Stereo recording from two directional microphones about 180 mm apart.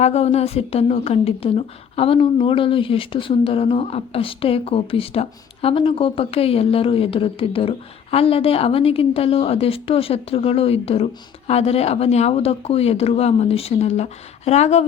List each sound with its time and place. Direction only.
0.0 s a woman's voice: 35° left (ahead or behind)